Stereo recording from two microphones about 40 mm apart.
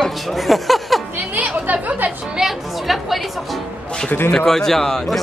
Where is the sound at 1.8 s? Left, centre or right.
Right.